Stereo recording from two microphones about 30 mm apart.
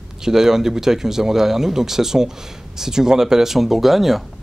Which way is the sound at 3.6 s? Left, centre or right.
Centre.